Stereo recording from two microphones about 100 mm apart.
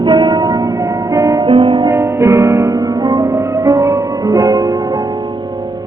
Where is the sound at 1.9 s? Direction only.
30° right (ahead or behind).